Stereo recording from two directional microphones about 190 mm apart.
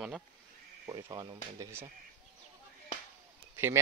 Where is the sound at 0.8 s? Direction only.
20° right (ahead or behind).